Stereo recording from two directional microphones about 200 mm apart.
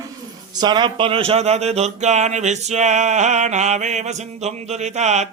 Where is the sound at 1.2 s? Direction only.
30° right (ahead or behind).